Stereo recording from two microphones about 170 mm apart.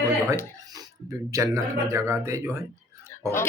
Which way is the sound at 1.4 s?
15° right (ahead or behind).